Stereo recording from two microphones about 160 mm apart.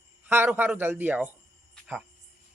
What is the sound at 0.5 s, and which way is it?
Speech, 15° right (ahead or behind).